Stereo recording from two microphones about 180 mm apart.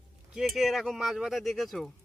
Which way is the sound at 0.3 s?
Centre (ahead or behind).